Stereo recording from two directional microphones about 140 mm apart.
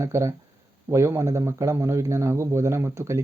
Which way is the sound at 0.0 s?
20° right (ahead or behind).